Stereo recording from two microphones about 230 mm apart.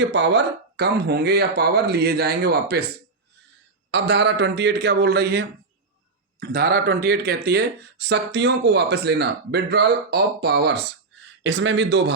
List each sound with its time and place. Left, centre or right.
0.0 s speech: right
3.9 s speech: right